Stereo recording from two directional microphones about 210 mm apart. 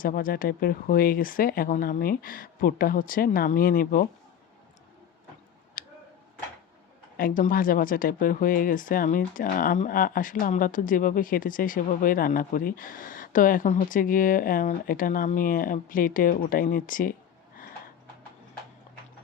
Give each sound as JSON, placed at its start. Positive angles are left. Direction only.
{"t": 0.0, "sound": "speech", "side_deg": 40}
{"t": 5.8, "sound": "a sound", "side_deg": 40}
{"t": 7.2, "sound": "speech", "side_deg": 40}